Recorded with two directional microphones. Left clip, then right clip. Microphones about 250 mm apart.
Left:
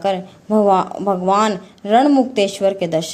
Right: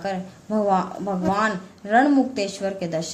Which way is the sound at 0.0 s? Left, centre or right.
Left.